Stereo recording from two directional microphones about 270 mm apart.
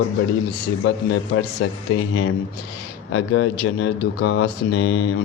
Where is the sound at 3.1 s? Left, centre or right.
Left.